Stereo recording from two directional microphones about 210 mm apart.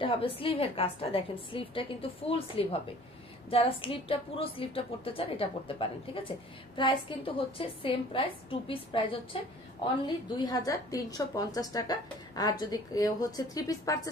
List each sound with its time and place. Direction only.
0.0 s a woman's voice: 25° left (ahead or behind)